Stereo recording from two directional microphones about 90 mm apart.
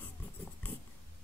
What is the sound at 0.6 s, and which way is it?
Dog, 20° left (ahead or behind).